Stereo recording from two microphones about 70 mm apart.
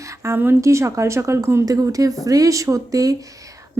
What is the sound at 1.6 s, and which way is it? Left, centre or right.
Speech, right.